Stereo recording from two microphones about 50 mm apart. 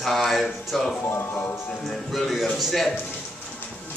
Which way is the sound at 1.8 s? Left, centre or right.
Centre.